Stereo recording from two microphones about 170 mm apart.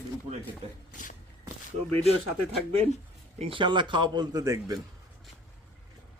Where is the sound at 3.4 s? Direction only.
30° right (ahead or behind).